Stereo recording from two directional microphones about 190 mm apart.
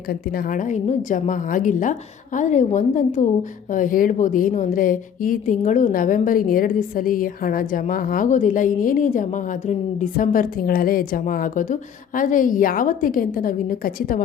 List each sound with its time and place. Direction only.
0.1 s speech: 50° left (ahead or behind)